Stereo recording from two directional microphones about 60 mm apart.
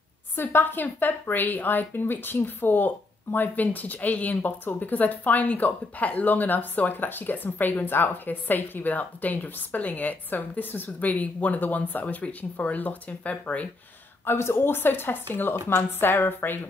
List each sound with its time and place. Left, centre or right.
0.4 s a woman's voice: left
14.2 s a woman's voice: left